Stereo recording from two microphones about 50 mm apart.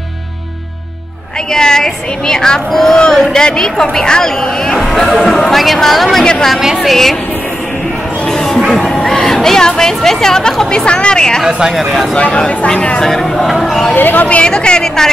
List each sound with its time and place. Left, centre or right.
1.5 s a woman's voice: centre
8.3 s music: centre
8.6 s speech: centre
11.4 s speech: centre
12.2 s speech: left
13.0 s speech: centre
13.9 s speech: left
14.4 s speech: centre